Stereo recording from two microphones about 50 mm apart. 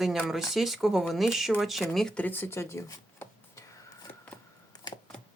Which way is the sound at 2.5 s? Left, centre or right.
Left.